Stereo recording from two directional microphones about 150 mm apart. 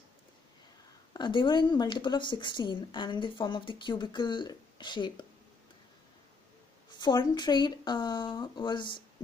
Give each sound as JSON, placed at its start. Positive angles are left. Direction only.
{"t": 1.1, "sound": "speech", "side_deg": 30}
{"t": 6.9, "sound": "speech", "side_deg": 30}